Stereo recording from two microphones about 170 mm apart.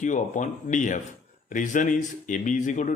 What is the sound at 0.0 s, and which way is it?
Speech, 45° left (ahead or behind).